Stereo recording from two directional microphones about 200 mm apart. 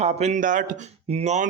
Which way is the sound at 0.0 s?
35° right (ahead or behind).